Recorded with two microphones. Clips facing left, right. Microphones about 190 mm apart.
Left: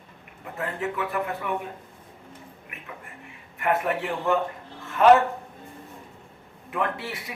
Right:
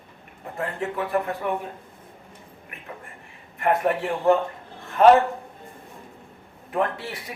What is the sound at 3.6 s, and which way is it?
A man's voice, 35° right (ahead or behind).